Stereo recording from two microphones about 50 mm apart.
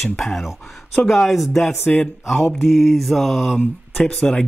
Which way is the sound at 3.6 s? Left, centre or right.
Centre.